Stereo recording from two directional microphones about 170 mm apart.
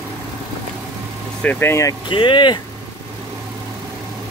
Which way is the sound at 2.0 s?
30° left (ahead or behind).